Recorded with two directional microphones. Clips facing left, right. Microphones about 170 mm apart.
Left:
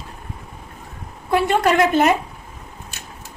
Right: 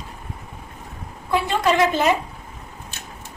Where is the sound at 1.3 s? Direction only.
55° left (ahead or behind).